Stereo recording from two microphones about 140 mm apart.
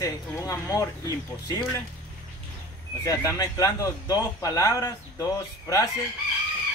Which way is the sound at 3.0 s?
25° left (ahead or behind).